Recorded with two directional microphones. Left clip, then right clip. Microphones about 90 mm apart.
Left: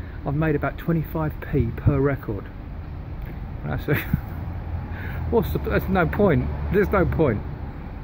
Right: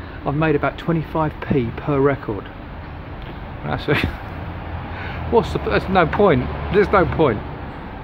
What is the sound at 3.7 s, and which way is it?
Speech, 15° right (ahead or behind).